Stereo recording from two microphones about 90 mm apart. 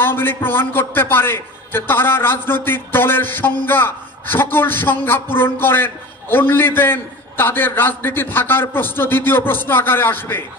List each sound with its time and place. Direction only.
0.0 s a man's voice: 25° left (ahead or behind)